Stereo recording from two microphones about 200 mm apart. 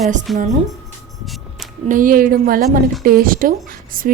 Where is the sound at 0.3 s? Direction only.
35° right (ahead or behind).